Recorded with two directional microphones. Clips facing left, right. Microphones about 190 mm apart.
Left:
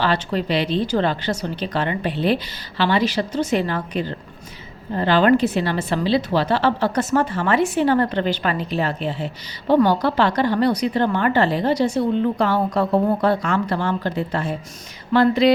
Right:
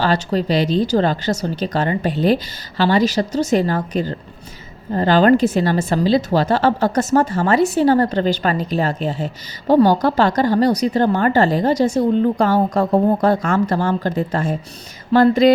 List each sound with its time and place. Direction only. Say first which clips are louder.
0.0 s a woman's voice: right 3 dB; 40° right (ahead or behind)